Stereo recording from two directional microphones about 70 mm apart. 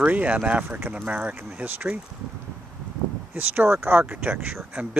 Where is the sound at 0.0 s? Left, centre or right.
Right.